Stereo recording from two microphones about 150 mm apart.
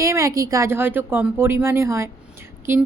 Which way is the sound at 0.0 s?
20° right (ahead or behind).